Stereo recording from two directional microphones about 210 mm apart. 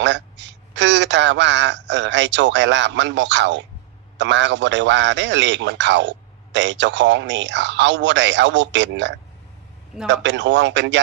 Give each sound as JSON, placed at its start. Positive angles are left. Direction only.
{"t": 0.0, "sound": "a man's voice", "side_deg": -60}